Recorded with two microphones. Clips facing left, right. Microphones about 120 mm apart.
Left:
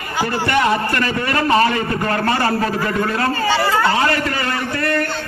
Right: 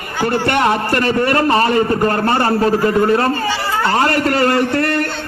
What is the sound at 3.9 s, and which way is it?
Speech, 50° right (ahead or behind).